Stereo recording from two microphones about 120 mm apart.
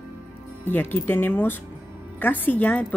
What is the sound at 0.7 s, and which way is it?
Speech, 15° left (ahead or behind).